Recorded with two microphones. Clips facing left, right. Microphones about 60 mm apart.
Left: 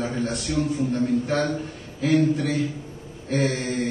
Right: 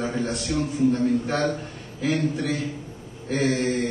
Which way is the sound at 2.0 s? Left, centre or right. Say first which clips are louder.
Left 4 dB; centre.